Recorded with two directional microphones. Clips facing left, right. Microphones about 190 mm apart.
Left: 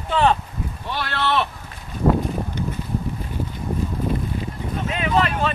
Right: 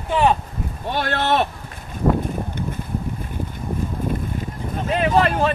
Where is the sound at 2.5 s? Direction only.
55° right (ahead or behind).